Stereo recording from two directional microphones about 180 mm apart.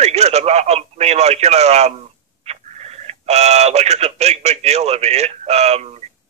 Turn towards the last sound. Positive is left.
turn(degrees=-35)  # may be behind; listen again after turning